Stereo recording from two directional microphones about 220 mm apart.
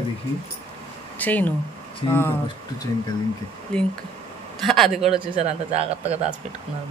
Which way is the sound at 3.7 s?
5° left (ahead or behind).